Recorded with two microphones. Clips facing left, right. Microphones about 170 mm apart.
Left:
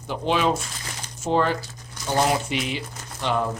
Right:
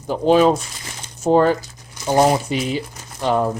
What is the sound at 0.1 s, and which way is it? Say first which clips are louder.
Speech: right 8 dB; 40° right (ahead or behind).